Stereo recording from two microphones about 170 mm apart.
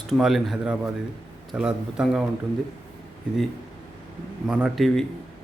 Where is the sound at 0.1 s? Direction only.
Centre (ahead or behind).